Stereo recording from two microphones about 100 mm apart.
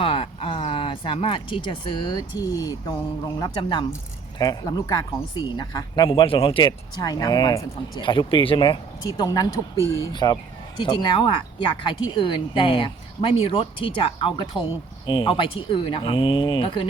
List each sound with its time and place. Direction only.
0.0 s speech: 70° left (ahead or behind); by 2.9 s 35° left (ahead or behind)
3.6 s speech: 55° left (ahead or behind)
4.4 s a woman's voice: 35° left (ahead or behind); by 8.8 s 50° left (ahead or behind)
9.0 s a woman's voice: 40° left (ahead or behind)
9.7 s speech: 30° right (ahead or behind)
10.1 s a woman's voice: 45° left (ahead or behind)